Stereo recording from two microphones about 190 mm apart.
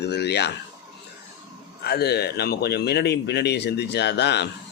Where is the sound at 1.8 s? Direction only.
55° left (ahead or behind).